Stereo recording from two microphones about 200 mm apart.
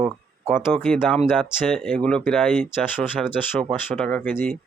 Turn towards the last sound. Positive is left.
turn(degrees=5)  # may be behind; listen again after turning